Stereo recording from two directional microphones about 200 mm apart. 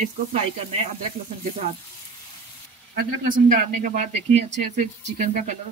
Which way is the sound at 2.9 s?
40° right (ahead or behind).